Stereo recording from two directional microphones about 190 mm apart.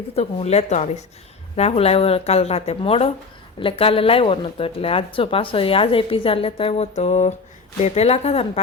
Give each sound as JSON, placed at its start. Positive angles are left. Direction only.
{"t": 0.2, "sound": "speech", "side_deg": 35}